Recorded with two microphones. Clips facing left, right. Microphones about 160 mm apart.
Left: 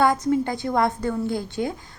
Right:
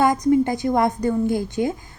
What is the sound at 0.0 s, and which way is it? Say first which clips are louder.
A woman's voice: right 3 dB; 20° right (ahead or behind).